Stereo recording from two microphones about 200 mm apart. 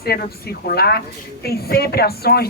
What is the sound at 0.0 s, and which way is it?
A woman's voice, 50° left (ahead or behind).